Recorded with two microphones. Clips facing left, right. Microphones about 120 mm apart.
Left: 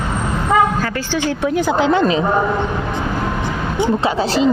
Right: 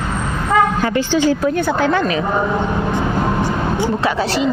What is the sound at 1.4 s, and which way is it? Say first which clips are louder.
Speech: left 1 dB; 15° left (ahead or behind).